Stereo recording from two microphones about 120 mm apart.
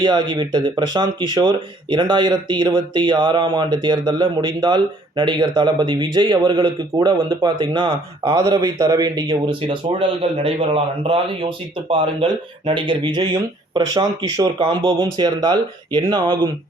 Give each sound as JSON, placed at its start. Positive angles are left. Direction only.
{"t": 0.0, "sound": "speech", "side_deg": -40}
{"t": 9.6, "sound": "speech", "side_deg": -50}